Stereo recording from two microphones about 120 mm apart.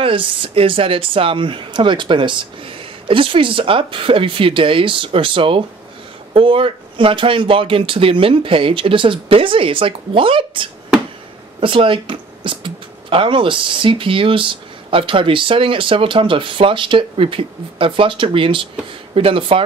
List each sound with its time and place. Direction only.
0.0 s speech: 45° right (ahead or behind)